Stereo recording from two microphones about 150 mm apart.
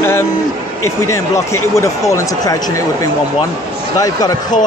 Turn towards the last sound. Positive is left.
turn(degrees=25)  # may be behind; listen again after turning